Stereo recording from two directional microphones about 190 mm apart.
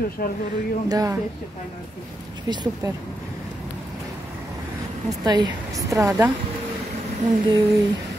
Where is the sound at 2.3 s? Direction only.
25° right (ahead or behind).